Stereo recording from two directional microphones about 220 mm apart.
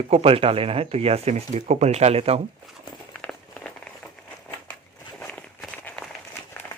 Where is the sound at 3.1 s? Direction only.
5° left (ahead or behind).